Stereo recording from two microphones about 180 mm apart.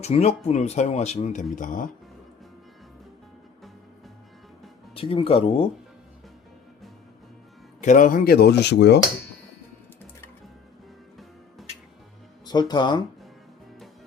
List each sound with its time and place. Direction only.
0.0 s speech: 35° left (ahead or behind)
4.9 s speech: 30° left (ahead or behind)
7.8 s speech: 45° left (ahead or behind); by 9.0 s 70° left (ahead or behind)
12.5 s speech: 25° left (ahead or behind)